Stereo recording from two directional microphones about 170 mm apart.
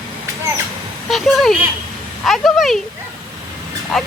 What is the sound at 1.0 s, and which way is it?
Speech, centre (ahead or behind).